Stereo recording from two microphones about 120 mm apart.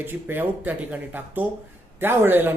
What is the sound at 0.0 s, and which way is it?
Speech, 15° right (ahead or behind).